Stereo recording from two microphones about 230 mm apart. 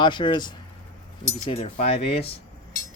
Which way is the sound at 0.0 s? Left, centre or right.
Centre.